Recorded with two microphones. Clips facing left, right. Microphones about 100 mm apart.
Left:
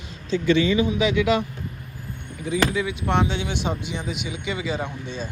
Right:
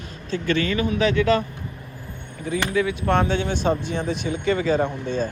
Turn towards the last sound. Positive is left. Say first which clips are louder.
# right 7 dB
turn(degrees=-50)  # may be behind; listen again after turning